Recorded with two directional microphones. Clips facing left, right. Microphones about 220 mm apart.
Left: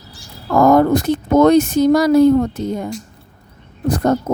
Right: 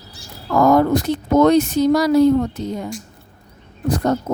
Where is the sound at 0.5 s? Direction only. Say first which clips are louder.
Left 2 dB; 50° left (ahead or behind).